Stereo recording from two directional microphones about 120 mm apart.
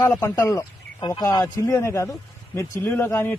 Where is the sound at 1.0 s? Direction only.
35° left (ahead or behind).